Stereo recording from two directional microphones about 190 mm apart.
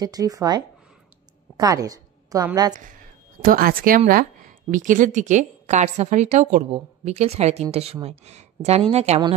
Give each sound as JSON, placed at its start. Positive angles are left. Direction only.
{"t": 0.0, "sound": "a woman's voice", "side_deg": -20}
{"t": 2.7, "sound": "a woman's voice", "side_deg": -45}